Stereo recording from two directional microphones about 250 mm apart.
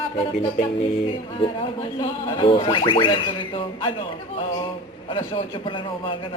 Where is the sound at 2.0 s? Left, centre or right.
Centre.